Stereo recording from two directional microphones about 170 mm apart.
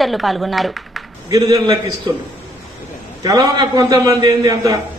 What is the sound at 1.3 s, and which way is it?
Speech, 25° right (ahead or behind).